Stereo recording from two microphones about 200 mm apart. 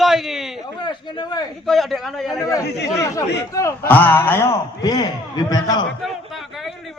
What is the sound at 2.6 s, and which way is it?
Speech, 55° left (ahead or behind).